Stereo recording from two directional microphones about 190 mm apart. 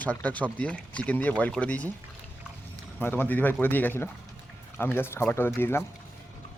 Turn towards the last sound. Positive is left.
turn(degrees=10)  # may be behind; listen again after turning